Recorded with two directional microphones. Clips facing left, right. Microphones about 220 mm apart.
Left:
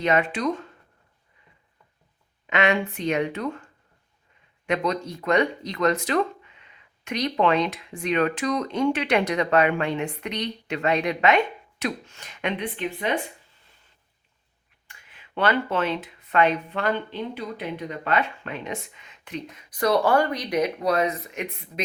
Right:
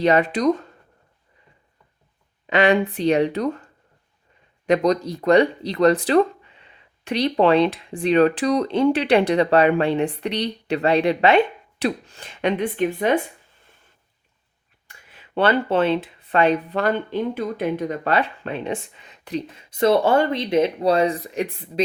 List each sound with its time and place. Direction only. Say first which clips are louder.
0.0 s speech: right 5 dB; 35° right (ahead or behind)
2.5 s speech: right 5 dB; 35° right (ahead or behind)
15.4 s speech: right 5 dB; 30° right (ahead or behind)